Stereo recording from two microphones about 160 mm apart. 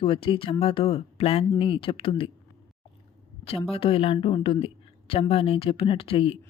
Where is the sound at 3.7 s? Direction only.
35° left (ahead or behind).